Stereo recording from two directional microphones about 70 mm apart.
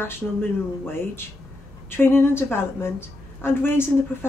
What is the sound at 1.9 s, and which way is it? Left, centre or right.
A woman's voice, left.